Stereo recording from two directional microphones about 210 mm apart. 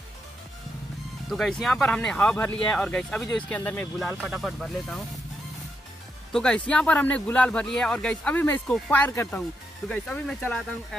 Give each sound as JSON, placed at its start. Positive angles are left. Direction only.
{"t": 1.3, "sound": "a man's voice", "side_deg": 0}
{"t": 4.1, "sound": "a man's voice", "side_deg": -5}
{"t": 6.3, "sound": "a man's voice", "side_deg": 5}